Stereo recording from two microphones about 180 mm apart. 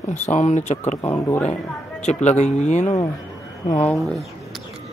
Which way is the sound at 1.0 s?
15° left (ahead or behind).